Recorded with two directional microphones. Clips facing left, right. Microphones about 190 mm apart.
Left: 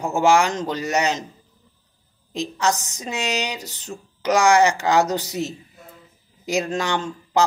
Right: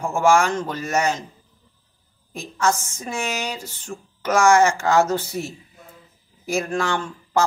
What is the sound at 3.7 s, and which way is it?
Speech, 40° left (ahead or behind).